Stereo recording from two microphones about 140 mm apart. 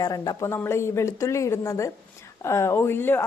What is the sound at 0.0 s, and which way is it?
A woman's voice, 25° left (ahead or behind).